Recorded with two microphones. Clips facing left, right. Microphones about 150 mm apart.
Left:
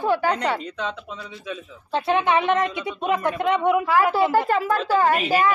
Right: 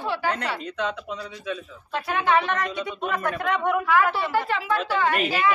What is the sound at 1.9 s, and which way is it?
Speech, 25° left (ahead or behind).